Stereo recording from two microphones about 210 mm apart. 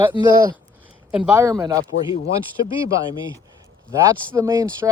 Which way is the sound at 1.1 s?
10° right (ahead or behind).